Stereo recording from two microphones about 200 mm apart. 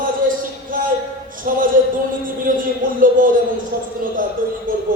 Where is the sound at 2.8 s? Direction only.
45° right (ahead or behind).